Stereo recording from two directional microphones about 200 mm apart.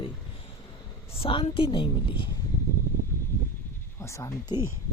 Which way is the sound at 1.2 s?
30° left (ahead or behind).